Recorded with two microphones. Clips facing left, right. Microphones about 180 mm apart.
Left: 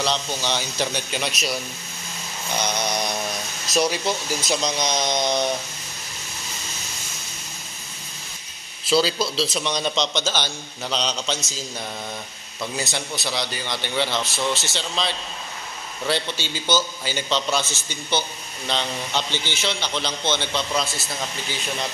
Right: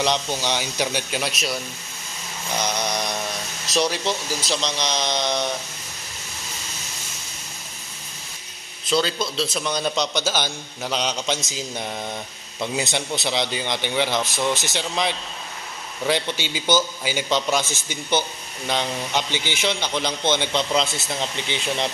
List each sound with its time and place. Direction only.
0.0 s a man's voice: 15° right (ahead or behind); by 1.6 s centre (ahead or behind)
2.5 s mantra: centre (ahead or behind)
4.5 s a sound: 5° left (ahead or behind)
8.8 s a man's voice: 5° left (ahead or behind); by 21.8 s 25° right (ahead or behind)